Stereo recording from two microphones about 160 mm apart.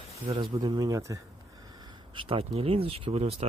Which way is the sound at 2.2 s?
35° right (ahead or behind).